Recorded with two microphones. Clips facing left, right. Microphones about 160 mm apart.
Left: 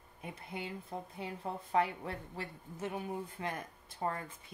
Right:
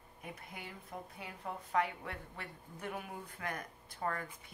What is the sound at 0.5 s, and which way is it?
A woman's voice, 25° left (ahead or behind).